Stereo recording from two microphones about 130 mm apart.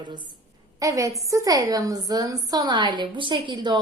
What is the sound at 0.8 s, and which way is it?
A woman's voice, 25° right (ahead or behind).